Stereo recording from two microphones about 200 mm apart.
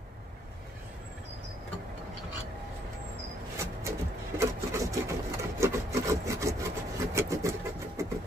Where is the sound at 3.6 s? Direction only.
15° right (ahead or behind).